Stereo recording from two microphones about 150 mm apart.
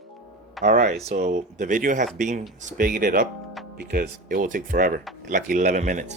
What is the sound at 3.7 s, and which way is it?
Speech, 90° right.